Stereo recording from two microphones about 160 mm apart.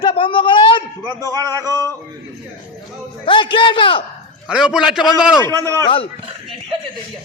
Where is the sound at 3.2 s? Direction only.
30° left (ahead or behind).